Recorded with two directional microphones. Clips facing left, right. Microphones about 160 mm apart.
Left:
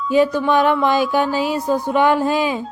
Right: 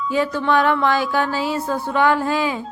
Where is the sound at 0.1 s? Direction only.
15° left (ahead or behind).